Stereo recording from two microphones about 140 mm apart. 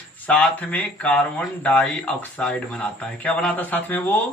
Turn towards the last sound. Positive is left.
turn(degrees=15)  # may be behind; listen again after turning